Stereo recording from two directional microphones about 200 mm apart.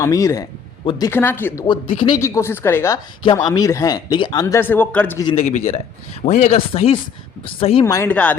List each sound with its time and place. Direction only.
0.0 s speech: 15° left (ahead or behind)
1.6 s speech: 25° left (ahead or behind); by 5.2 s 10° left (ahead or behind)
5.2 s a man's voice: 30° left (ahead or behind); by 8.4 s 5° left (ahead or behind)